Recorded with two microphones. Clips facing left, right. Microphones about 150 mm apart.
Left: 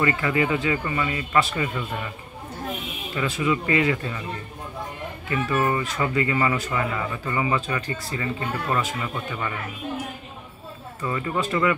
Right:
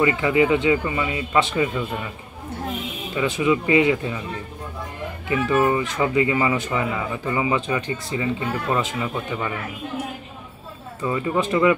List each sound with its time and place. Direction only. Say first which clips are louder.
0.0 s speech: right 4 dB; 15° right (ahead or behind)
3.2 s speech: right 4 dB; 15° right (ahead or behind)
5.3 s speech: right 4 dB; 15° right (ahead or behind)
11.0 s speech: right 4 dB; 15° right (ahead or behind)